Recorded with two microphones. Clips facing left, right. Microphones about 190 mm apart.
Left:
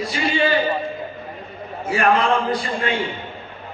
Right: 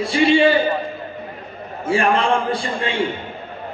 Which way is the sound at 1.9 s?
30° right (ahead or behind).